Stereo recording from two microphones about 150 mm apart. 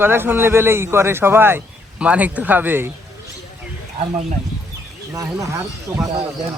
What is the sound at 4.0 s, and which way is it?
Speech, 40° right (ahead or behind).